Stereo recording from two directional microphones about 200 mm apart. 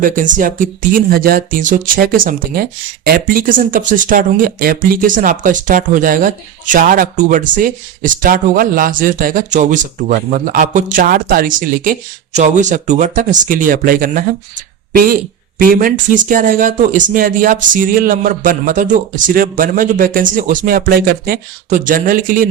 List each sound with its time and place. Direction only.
0.0 s speech: 40° right (ahead or behind)